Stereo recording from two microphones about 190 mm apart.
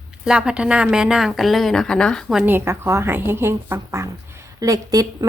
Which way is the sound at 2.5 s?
10° right (ahead or behind).